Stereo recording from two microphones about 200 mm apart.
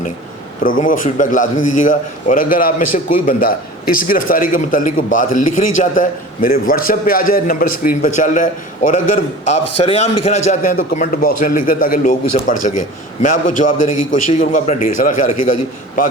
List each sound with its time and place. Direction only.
0.8 s a man's voice: 40° left (ahead or behind)